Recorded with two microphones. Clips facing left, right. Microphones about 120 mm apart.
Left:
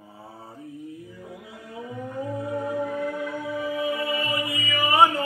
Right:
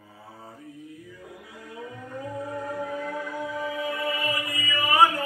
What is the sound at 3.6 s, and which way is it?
Music, 20° left (ahead or behind).